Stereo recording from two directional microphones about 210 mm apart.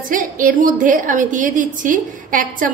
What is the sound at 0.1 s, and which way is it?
A woman's voice, 40° right (ahead or behind).